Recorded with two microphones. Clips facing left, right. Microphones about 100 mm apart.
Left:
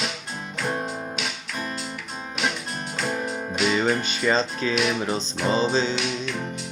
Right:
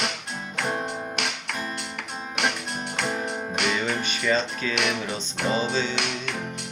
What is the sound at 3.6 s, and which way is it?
Music, 60° right (ahead or behind).